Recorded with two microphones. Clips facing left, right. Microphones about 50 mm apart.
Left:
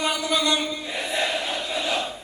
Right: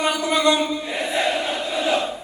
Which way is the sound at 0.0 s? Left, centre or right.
Right.